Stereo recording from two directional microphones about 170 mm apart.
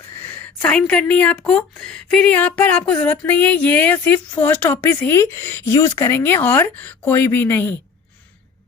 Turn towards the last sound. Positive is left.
turn(degrees=10)  # may be behind; listen again after turning